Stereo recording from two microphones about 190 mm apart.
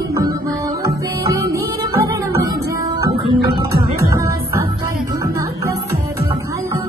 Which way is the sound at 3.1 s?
25° right (ahead or behind).